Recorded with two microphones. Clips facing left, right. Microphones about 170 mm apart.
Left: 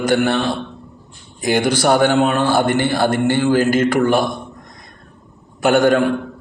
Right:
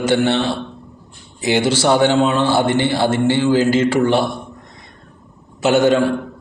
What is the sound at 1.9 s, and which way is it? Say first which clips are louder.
Speech: even; 50° left (ahead or behind).